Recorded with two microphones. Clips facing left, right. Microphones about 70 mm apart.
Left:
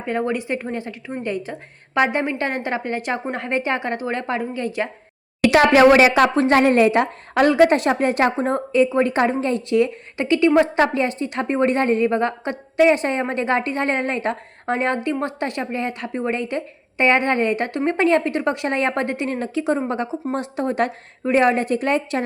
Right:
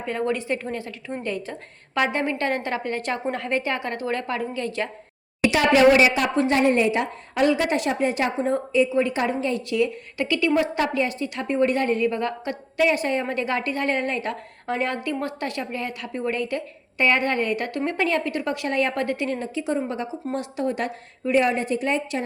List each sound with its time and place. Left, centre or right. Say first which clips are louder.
0.0 s a woman's voice: left 3 dB; left
1.0 s a woman's voice: left 2 dB; centre
5.5 s a woman's voice: left 4 dB; left
6.5 s a woman's voice: left 5 dB; left
19.4 s a woman's voice: left 4 dB; left